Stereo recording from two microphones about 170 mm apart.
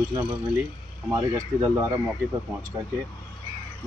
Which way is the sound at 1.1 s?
20° right (ahead or behind).